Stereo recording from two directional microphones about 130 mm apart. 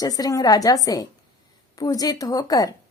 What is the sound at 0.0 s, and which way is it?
Speech, 30° left (ahead or behind).